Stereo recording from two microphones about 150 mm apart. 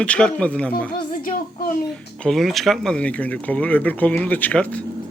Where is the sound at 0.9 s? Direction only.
65° left (ahead or behind).